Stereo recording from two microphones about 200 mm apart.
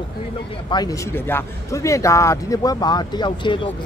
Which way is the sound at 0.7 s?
20° left (ahead or behind).